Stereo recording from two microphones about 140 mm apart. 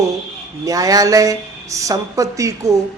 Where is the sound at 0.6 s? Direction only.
25° right (ahead or behind).